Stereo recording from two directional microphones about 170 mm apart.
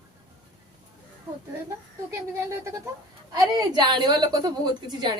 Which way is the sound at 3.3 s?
25° right (ahead or behind).